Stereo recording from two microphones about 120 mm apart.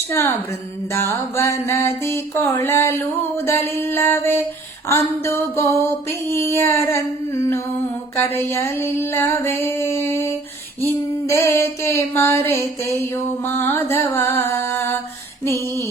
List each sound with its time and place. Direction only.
0.1 s mantra: 20° left (ahead or behind)
1.4 s mantra: 25° left (ahead or behind)
8.2 s mantra: 20° left (ahead or behind)
11.3 s mantra: 20° left (ahead or behind)